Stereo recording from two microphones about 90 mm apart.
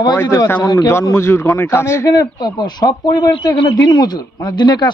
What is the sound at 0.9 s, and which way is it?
Speech, 30° left (ahead or behind).